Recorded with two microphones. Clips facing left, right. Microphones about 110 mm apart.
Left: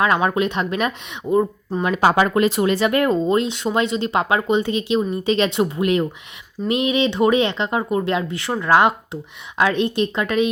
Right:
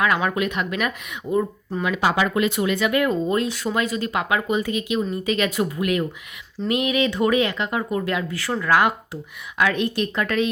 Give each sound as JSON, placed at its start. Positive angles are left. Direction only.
{"t": 0.0, "sound": "speech", "side_deg": 30}
{"t": 3.2, "sound": "speech", "side_deg": 25}